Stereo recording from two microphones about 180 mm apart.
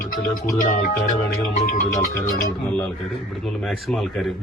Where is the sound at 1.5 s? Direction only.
45° left (ahead or behind).